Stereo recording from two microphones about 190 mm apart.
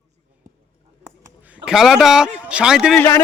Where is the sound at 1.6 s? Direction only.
Centre (ahead or behind).